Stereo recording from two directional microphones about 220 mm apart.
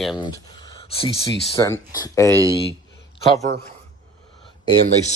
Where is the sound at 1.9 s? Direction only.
15° left (ahead or behind).